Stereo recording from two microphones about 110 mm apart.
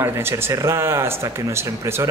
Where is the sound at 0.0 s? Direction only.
20° right (ahead or behind).